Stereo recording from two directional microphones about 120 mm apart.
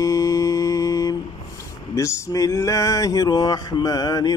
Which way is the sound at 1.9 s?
25° left (ahead or behind).